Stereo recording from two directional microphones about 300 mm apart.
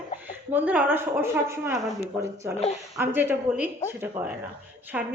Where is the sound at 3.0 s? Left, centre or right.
Centre.